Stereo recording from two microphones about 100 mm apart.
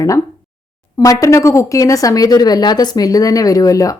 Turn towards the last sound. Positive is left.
turn(degrees=35)  # may be behind; listen again after turning